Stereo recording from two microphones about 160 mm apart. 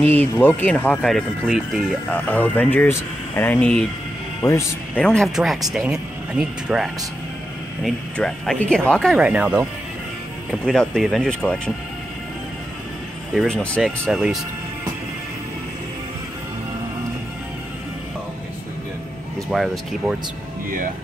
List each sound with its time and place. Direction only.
0.0 s speech: 10° left (ahead or behind)
4.9 s speech: 5° left (ahead or behind)
10.5 s speech: 5° left (ahead or behind)
13.3 s speech: 5° left (ahead or behind)
19.5 s speech: centre (ahead or behind)